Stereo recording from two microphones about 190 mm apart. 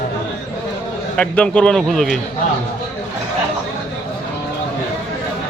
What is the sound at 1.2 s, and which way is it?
Speech, 5° left (ahead or behind).